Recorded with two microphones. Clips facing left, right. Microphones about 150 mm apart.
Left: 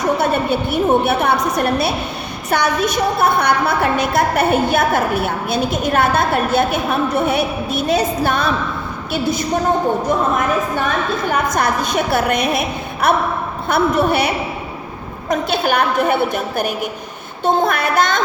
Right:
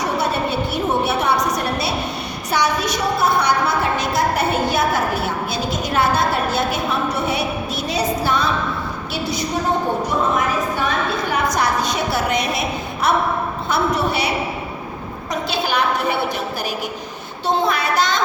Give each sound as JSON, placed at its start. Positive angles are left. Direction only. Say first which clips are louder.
{"t": 0.7, "sound": "a woman's voice", "louder": "left 7 dB", "side_deg": 55}
{"t": 11.3, "sound": "a woman's voice", "louder": "left 2 dB", "side_deg": 50}
{"t": 15.3, "sound": "a woman's voice", "louder": "left 5 dB", "side_deg": 55}